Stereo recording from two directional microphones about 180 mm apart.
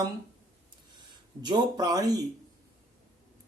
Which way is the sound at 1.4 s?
20° right (ahead or behind).